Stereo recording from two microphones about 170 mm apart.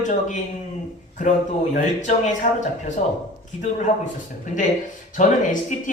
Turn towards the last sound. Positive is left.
turn(degrees=50)  # may be behind; listen again after turning